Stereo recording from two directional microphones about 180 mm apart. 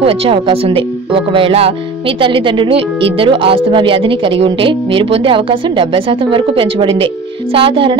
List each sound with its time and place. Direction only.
0.0 s speech: 30° right (ahead or behind)